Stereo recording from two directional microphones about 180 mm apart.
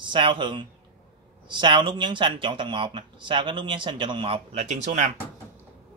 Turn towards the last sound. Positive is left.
turn(degrees=-40)  # may be behind; listen again after turning